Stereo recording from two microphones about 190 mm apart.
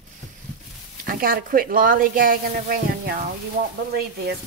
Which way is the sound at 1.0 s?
50° right (ahead or behind).